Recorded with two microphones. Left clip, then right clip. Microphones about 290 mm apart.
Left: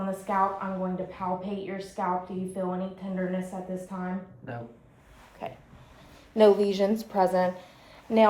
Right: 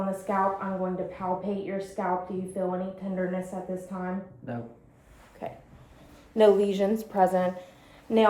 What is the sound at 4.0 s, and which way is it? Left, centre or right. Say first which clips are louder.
Speech: right 1 dB; centre.